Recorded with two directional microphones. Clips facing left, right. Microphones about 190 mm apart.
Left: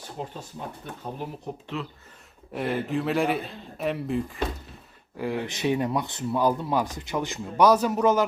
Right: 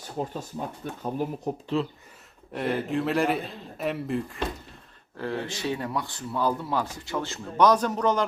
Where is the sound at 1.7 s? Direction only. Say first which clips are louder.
Right 7 dB; 30° right (ahead or behind).